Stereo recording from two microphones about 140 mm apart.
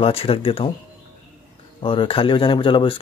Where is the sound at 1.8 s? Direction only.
40° left (ahead or behind).